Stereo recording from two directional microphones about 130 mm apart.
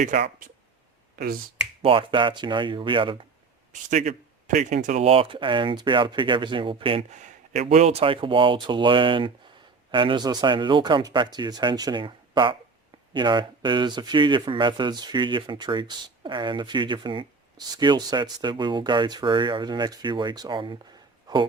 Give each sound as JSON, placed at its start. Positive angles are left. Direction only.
{"t": 0.0, "sound": "speech", "side_deg": -90}
{"t": 1.8, "sound": "speech", "side_deg": -45}
{"t": 3.7, "sound": "speech", "side_deg": -70}
{"t": 5.0, "sound": "speech", "side_deg": -45}
{"t": 7.1, "sound": "speech", "side_deg": -65}